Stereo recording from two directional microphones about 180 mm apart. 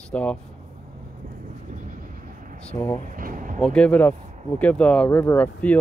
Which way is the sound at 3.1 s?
45° right (ahead or behind).